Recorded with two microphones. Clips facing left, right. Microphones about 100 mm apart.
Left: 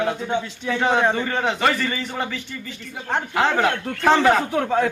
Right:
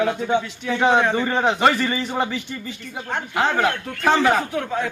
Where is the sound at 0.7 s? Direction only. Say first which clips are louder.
Right 2 dB; 15° right (ahead or behind).